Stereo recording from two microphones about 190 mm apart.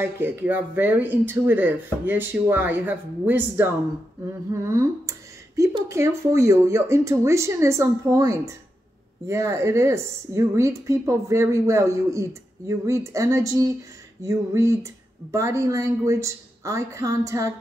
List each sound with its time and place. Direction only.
0.0 s a woman's voice: 10° right (ahead or behind)